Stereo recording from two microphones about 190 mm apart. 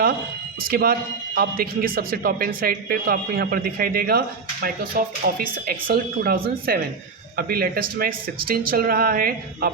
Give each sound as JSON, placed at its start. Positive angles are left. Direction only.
{"t": 0.6, "sound": "speech", "side_deg": -50}